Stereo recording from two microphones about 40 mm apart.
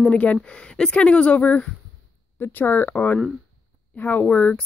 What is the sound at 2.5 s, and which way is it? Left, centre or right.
Speech, left.